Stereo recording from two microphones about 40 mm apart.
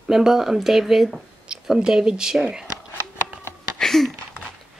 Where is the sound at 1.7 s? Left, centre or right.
Centre.